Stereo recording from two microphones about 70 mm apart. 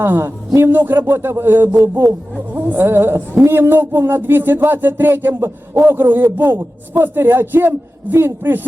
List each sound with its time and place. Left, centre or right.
0.0 s a man's voice: right